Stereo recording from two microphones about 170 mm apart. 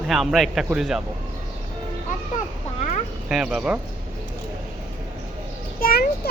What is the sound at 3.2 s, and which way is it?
Speech, 5° right (ahead or behind).